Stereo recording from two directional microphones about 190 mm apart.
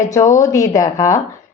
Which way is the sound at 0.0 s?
15° left (ahead or behind).